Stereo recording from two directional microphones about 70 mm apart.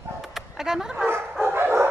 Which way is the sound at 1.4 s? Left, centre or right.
Right.